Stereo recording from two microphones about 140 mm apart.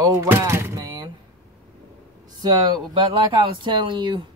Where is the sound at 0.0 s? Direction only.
20° right (ahead or behind).